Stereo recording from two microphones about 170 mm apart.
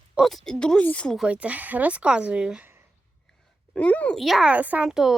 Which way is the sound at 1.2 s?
10° right (ahead or behind).